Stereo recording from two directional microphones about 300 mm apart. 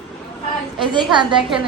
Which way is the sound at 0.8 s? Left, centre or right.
Centre.